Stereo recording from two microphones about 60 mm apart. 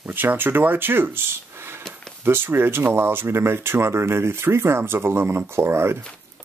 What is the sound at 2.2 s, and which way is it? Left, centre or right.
Speech, right.